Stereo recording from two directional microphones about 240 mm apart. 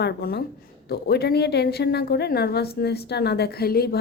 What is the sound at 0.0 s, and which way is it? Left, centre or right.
A woman's voice, left.